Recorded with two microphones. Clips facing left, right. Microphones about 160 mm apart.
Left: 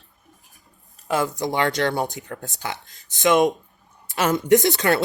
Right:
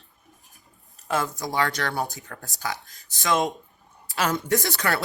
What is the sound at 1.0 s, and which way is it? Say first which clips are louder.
A woman's voice: left 4 dB; 15° left (ahead or behind).